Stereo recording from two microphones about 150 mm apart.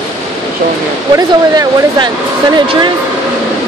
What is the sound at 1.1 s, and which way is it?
Speech, 25° right (ahead or behind).